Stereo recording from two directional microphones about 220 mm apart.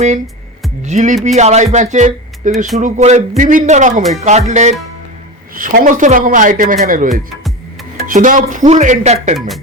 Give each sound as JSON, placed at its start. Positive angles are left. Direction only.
{"t": 0.9, "sound": "speech", "side_deg": -35}